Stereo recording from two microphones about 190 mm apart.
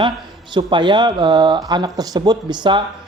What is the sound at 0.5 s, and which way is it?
Speech, 25° right (ahead or behind).